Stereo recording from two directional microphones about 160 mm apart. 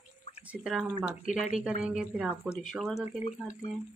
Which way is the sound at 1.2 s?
50° left (ahead or behind).